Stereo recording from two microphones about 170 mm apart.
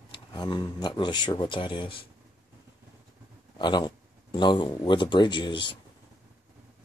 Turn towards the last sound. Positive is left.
turn(degrees=30)  # may be behind; listen again after turning